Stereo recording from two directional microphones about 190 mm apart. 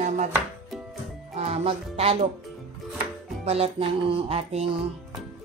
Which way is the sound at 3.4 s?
35° right (ahead or behind).